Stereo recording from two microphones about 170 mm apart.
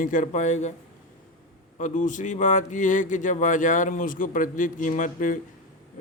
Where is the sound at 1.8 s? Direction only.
50° left (ahead or behind).